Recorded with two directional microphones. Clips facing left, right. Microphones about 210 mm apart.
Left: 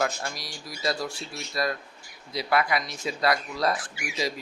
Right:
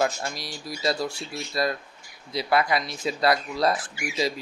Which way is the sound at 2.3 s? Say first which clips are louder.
Right 2 dB; 30° right (ahead or behind).